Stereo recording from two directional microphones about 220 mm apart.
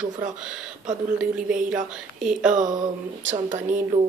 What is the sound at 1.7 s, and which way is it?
Speech, 5° right (ahead or behind).